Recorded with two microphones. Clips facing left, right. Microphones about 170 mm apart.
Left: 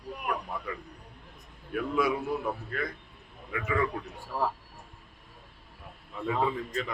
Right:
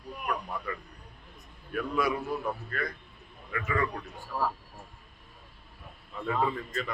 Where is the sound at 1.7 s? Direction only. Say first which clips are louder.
Left 2 dB; 20° left (ahead or behind).